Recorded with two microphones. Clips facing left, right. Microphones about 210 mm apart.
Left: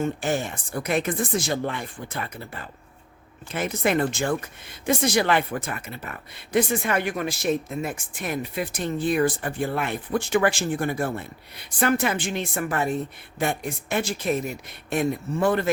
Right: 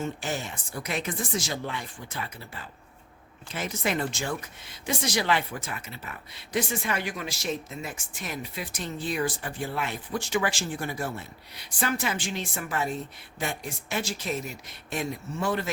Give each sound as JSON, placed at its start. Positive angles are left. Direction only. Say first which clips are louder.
{"t": 0.0, "sound": "speech", "louder": "left 7 dB", "side_deg": 55}